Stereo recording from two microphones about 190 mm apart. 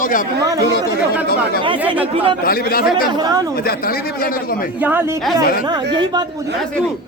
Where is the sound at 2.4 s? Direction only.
50° left (ahead or behind).